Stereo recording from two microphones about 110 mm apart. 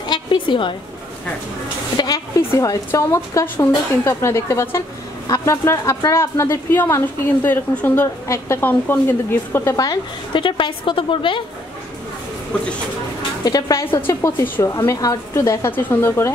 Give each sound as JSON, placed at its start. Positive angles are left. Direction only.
{"t": 0.0, "sound": "a sound", "side_deg": 45}
{"t": 2.0, "sound": "a woman's voice", "side_deg": 35}
{"t": 10.3, "sound": "a woman's voice", "side_deg": 50}
{"t": 13.4, "sound": "a woman's voice", "side_deg": 35}